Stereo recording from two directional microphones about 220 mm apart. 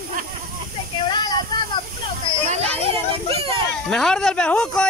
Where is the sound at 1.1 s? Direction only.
20° left (ahead or behind).